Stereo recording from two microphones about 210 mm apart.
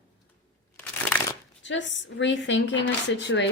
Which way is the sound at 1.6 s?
60° left (ahead or behind).